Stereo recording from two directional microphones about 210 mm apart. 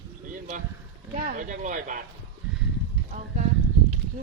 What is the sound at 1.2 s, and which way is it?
Speech, 35° right (ahead or behind).